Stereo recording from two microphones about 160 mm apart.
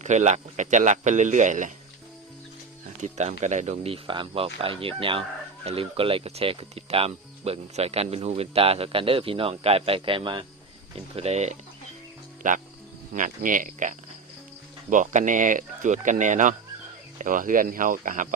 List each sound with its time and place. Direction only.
0.0 s speech: 45° right (ahead or behind)
3.0 s speech: 45° right (ahead or behind)